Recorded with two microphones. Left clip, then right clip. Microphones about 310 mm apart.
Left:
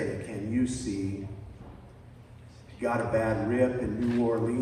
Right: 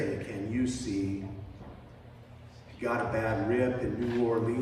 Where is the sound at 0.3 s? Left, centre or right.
Centre.